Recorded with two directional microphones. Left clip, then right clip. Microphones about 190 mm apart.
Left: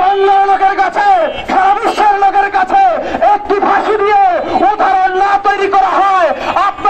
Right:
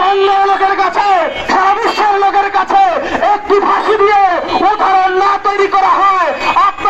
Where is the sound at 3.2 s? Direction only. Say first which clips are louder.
Left 1 dB; 40° left (ahead or behind).